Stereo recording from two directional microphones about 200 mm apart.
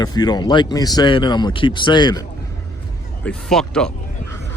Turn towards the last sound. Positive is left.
turn(degrees=5)  # may be behind; listen again after turning